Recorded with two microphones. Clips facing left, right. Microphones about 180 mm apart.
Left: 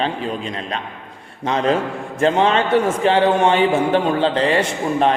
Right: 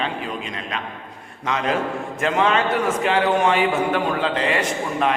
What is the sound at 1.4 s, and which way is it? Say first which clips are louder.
A man's voice: left 4 dB; 30° left (ahead or behind).